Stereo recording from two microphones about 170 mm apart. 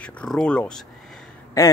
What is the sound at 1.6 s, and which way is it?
Speech, 20° left (ahead or behind).